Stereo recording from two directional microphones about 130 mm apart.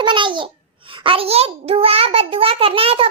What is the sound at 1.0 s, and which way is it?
A child's voice, 45° right (ahead or behind).